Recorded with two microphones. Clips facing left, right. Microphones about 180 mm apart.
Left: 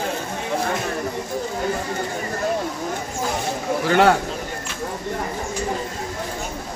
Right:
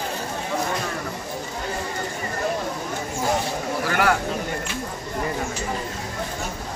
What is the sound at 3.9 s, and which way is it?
Speech, 25° left (ahead or behind).